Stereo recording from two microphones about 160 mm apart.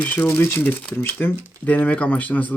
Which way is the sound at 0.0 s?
10° left (ahead or behind).